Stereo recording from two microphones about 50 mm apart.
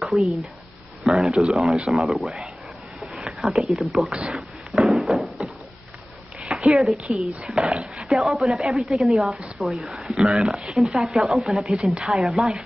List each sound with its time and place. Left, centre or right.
0.0 s speech: centre
3.2 s a sound: centre
3.7 s speech: centre
4.3 s a sound: centre
6.7 s speech: centre
11.7 s a woman's voice: centre
12.1 s speech: centre